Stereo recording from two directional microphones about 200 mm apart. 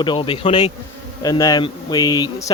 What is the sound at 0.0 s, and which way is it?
Speech, 25° left (ahead or behind).